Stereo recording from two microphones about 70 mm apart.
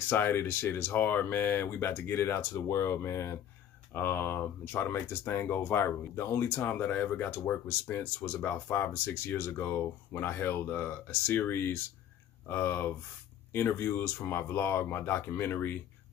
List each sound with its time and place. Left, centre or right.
0.1 s speech: left
6.5 s speech: left
7.6 s speech: left
8.0 s speech: left